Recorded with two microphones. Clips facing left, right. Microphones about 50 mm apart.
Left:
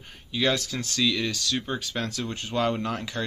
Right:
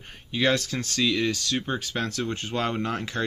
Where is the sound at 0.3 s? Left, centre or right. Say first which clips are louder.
Right 2 dB; right.